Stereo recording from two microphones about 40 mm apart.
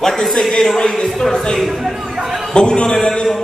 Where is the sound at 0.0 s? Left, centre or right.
Centre.